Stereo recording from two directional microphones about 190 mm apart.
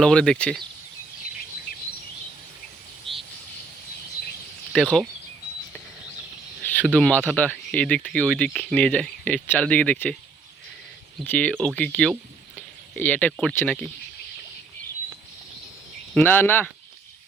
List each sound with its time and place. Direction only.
0.0 s speech: 5° left (ahead or behind)
1.7 s bird vocalization: 50° left (ahead or behind)
3.1 s a sound: centre (ahead or behind)
4.7 s speech: centre (ahead or behind)
6.7 s speech: 5° left (ahead or behind)
11.2 s speech: 10° left (ahead or behind)
16.1 s speech: 10° left (ahead or behind)